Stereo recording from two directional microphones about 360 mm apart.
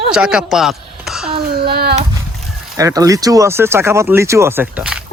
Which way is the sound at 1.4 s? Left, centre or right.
Right.